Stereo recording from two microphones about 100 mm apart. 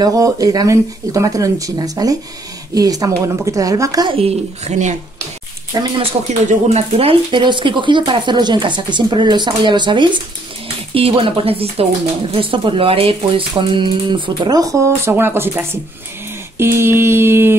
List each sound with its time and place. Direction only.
0.0 s speech: 35° right (ahead or behind)
4.1 s speech: 85° right
5.7 s speech: 40° right (ahead or behind)
6.2 s speech: 90° right
6.7 s speech: 75° right (ahead or behind); by 10.1 s 50° right (ahead or behind)
11.0 s speech: 70° right (ahead or behind); by 14.5 s 55° right (ahead or behind)
14.5 s speech: 35° right (ahead or behind)